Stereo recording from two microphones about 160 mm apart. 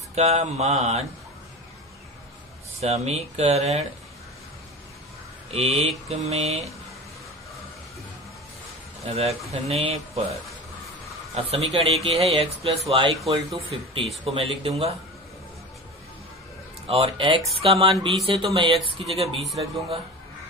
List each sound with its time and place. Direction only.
0.1 s speech: 45° right (ahead or behind)
2.8 s speech: 40° right (ahead or behind)
5.5 s speech: 40° right (ahead or behind)
9.0 s speech: 40° right (ahead or behind)
11.5 s speech: 40° right (ahead or behind)
16.8 s speech: 35° right (ahead or behind)